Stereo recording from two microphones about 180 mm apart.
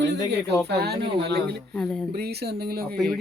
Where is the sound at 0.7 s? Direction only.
65° right (ahead or behind).